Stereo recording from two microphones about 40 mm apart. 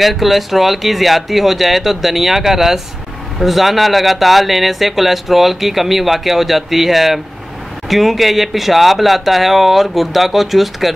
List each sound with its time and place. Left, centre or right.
0.0 s speech: centre